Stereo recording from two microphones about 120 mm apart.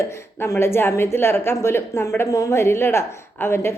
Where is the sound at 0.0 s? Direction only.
20° left (ahead or behind).